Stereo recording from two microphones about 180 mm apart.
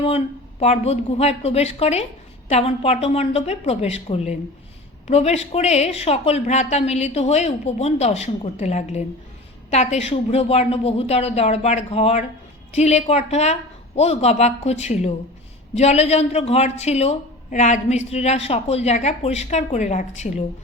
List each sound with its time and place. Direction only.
0.6 s speech: 35° left (ahead or behind)